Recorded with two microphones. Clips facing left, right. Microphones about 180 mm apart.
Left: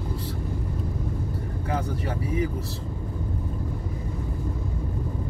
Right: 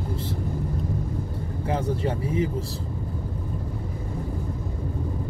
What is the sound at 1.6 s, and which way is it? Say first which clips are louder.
Speech: right 4 dB; 30° right (ahead or behind).